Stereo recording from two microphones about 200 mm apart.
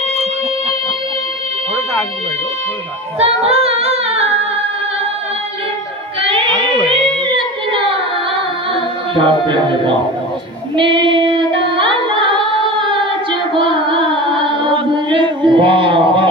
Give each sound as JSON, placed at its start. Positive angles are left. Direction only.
{"t": 3.2, "sound": "singing", "side_deg": -30}
{"t": 6.2, "sound": "music", "side_deg": -25}
{"t": 6.9, "sound": "a sound", "side_deg": -25}
{"t": 9.1, "sound": "speech", "side_deg": -25}
{"t": 10.8, "sound": "child singing", "side_deg": -25}
{"t": 12.7, "sound": "music", "side_deg": -25}